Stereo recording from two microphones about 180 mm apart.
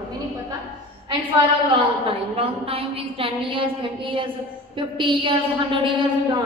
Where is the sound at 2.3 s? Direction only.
30° right (ahead or behind).